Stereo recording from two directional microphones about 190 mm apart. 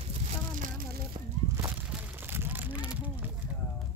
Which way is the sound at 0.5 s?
45° right (ahead or behind).